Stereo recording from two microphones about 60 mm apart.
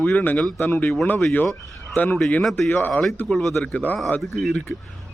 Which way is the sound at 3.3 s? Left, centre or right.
Centre.